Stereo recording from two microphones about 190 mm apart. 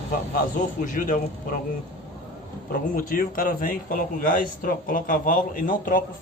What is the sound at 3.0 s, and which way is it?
A man's voice, 50° left (ahead or behind).